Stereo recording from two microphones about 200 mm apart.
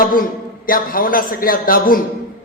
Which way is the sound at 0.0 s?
45° left (ahead or behind).